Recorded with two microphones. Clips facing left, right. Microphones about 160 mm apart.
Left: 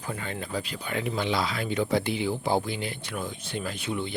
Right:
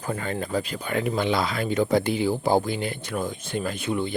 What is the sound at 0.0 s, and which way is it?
Speech, 45° right (ahead or behind).